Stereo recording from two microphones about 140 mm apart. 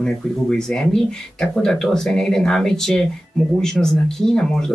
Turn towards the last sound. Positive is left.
turn(degrees=5)  # may be behind; listen again after turning